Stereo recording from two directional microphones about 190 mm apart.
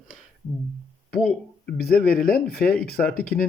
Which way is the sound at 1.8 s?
55° left (ahead or behind).